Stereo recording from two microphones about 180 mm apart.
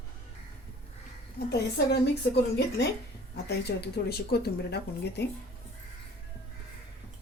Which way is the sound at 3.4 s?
65° left (ahead or behind).